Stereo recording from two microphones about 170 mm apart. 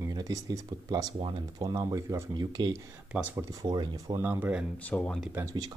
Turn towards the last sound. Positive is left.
turn(degrees=-20)  # may be behind; listen again after turning